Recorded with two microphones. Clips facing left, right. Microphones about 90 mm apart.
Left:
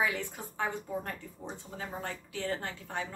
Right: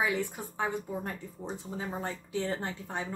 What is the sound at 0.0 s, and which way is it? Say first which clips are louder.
Speech: right 2 dB; 20° right (ahead or behind).